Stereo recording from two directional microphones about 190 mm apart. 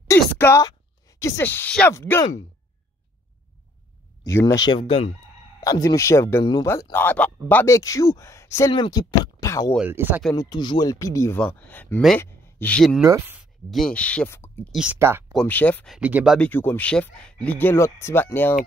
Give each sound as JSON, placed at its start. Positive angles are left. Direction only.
{"t": 0.4, "sound": "speech", "side_deg": 15}
{"t": 4.2, "sound": "speech", "side_deg": 15}
{"t": 5.6, "sound": "speech", "side_deg": 15}
{"t": 6.7, "sound": "speech", "side_deg": 10}
{"t": 9.8, "sound": "speech", "side_deg": -10}
{"t": 10.3, "sound": "speech", "side_deg": 20}
{"t": 13.0, "sound": "speech", "side_deg": -15}
{"t": 13.7, "sound": "speech", "side_deg": 5}
{"t": 14.7, "sound": "speech", "side_deg": -5}
{"t": 15.3, "sound": "speech", "side_deg": 10}
{"t": 16.0, "sound": "speech", "side_deg": -10}
{"t": 16.3, "sound": "speech", "side_deg": 10}